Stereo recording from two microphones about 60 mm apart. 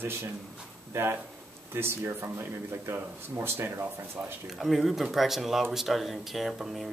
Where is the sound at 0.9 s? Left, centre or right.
Right.